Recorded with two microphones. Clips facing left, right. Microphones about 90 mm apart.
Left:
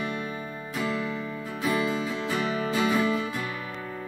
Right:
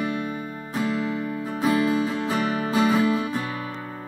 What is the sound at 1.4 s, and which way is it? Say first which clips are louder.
Music: right 5 dB; 35° right (ahead or behind).